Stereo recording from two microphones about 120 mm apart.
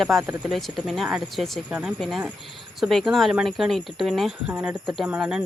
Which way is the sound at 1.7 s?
10° right (ahead or behind).